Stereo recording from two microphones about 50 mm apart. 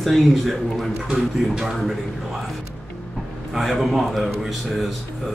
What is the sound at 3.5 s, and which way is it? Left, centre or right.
Speech, centre.